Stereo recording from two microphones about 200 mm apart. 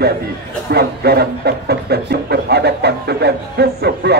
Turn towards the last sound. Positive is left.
turn(degrees=-55)  # may be behind; listen again after turning